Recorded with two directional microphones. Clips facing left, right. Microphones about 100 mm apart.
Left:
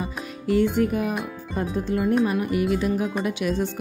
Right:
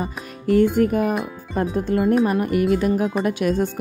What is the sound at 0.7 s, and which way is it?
Speech, 45° right (ahead or behind).